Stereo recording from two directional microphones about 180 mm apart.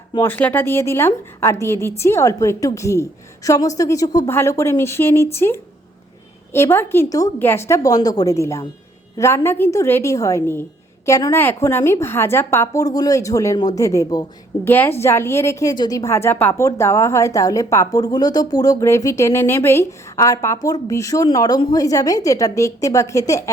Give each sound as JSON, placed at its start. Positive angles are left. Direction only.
{"t": 0.1, "sound": "a woman's voice", "side_deg": 10}